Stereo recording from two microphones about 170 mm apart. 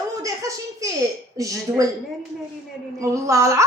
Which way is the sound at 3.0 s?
15° right (ahead or behind).